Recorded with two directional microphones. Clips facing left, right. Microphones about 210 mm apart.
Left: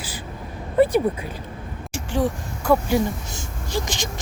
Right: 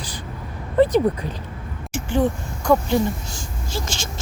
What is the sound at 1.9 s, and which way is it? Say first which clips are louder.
Speech: right 3 dB; centre (ahead or behind).